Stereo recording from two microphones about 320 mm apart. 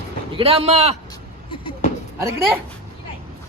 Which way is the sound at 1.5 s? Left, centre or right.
Centre.